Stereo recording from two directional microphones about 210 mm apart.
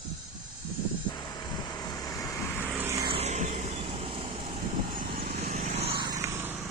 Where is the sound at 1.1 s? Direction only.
20° left (ahead or behind).